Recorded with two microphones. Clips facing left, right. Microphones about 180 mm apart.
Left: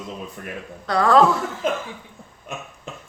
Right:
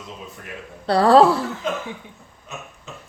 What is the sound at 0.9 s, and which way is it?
Speech, 35° right (ahead or behind).